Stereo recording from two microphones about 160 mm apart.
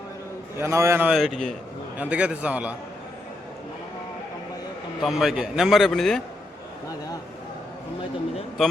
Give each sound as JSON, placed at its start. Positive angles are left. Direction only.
{"t": 0.5, "sound": "a man's voice", "side_deg": -15}
{"t": 1.1, "sound": "a man's voice", "side_deg": 0}
{"t": 5.0, "sound": "a man's voice", "side_deg": 0}